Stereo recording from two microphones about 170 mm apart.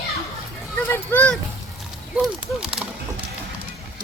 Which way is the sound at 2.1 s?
5° right (ahead or behind).